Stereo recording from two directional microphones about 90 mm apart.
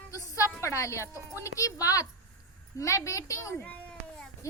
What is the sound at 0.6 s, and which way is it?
A woman's voice, 35° left (ahead or behind).